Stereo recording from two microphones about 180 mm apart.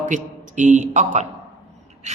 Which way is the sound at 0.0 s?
40° right (ahead or behind).